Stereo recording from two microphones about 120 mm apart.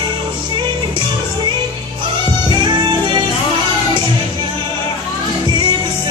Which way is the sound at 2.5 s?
40° right (ahead or behind).